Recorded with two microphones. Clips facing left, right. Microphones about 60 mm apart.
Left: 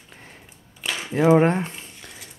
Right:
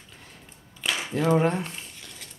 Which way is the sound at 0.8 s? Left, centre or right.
Centre.